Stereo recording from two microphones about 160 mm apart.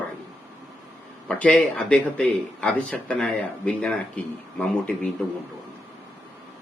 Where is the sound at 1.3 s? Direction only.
5° left (ahead or behind).